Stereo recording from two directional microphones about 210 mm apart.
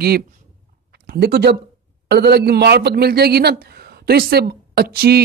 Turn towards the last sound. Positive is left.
turn(degrees=-45)  # may be behind; listen again after turning